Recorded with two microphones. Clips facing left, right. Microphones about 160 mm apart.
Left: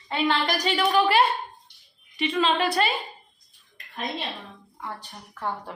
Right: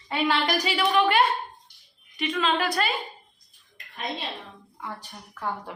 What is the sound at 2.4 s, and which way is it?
Speech, 30° left (ahead or behind).